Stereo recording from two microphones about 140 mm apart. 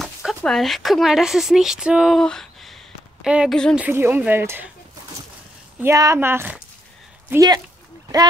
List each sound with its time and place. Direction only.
0.0 s a sound: centre (ahead or behind)
0.4 s speech: centre (ahead or behind)
2.1 s a sound: 5° left (ahead or behind)
3.3 s speech: 5° right (ahead or behind)
5.8 s a woman's voice: 20° right (ahead or behind)
7.2 s a woman's voice: 25° right (ahead or behind)